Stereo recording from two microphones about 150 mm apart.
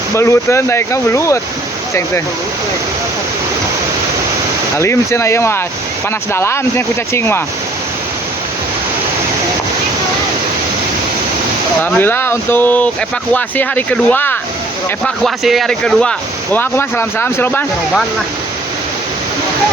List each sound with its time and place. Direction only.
0.2 s speech: 20° left (ahead or behind)
4.8 s speech: 20° left (ahead or behind)
11.8 s speech: 15° left (ahead or behind)
15.0 s speech: centre (ahead or behind)